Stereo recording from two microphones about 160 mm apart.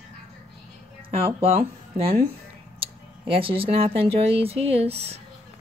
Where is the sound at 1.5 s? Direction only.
35° right (ahead or behind).